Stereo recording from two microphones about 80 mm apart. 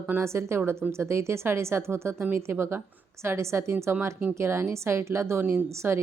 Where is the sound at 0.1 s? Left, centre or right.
Right.